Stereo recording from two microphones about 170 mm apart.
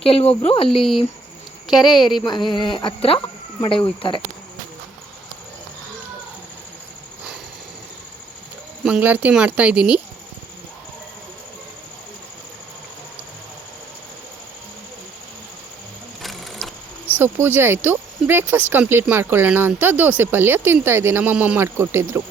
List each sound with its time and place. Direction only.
0.1 s speech: 35° left (ahead or behind)
1.9 s speech: 25° left (ahead or behind)
8.8 s speech: 5° right (ahead or behind)
16.2 s sewing machine: centre (ahead or behind)
17.2 s speech: 15° right (ahead or behind)